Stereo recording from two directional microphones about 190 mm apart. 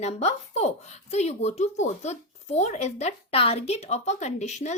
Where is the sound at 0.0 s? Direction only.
35° left (ahead or behind).